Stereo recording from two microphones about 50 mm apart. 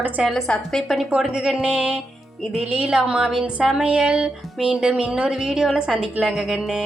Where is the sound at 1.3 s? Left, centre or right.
Centre.